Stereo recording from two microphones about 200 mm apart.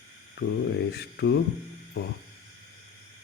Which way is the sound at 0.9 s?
55° left (ahead or behind).